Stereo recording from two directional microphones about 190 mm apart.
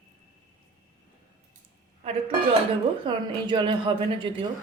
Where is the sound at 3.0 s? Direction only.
25° right (ahead or behind).